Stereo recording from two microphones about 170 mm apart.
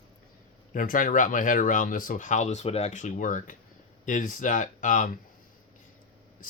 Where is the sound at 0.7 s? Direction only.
55° left (ahead or behind).